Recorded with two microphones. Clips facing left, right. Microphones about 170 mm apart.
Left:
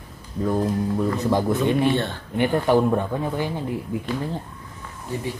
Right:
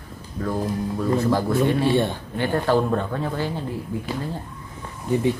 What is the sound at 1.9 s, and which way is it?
Speech, 15° right (ahead or behind).